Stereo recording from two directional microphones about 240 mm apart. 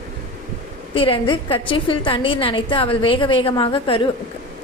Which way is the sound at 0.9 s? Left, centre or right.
Left.